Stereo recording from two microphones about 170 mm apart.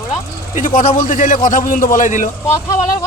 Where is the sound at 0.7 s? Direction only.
55° left (ahead or behind).